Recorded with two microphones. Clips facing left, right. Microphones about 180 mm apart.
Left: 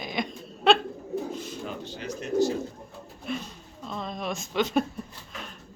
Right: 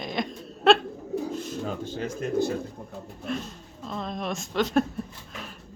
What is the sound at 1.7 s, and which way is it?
Speech, 50° right (ahead or behind).